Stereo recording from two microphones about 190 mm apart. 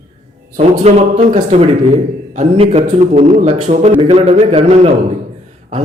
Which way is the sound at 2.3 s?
35° right (ahead or behind).